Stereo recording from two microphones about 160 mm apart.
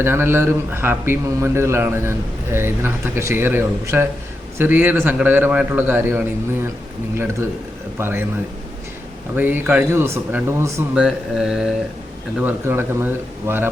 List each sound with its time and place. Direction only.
0.0 s a man's voice: 15° right (ahead or behind)
7.9 s a man's voice: 15° right (ahead or behind)
9.3 s a man's voice: 10° right (ahead or behind)
10.9 s mantra: 5° right (ahead or behind)
12.4 s a man's voice: 10° right (ahead or behind)